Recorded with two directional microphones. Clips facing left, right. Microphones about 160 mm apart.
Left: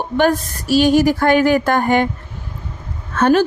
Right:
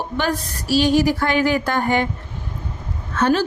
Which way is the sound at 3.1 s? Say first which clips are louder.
Left 4 dB; 50° left (ahead or behind).